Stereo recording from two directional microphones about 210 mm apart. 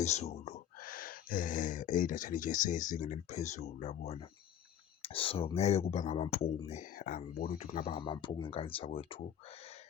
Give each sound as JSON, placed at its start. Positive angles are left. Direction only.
{"t": 0.0, "sound": "speech", "side_deg": 30}